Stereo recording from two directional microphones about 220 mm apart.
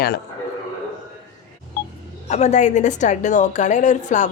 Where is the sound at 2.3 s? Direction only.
30° left (ahead or behind).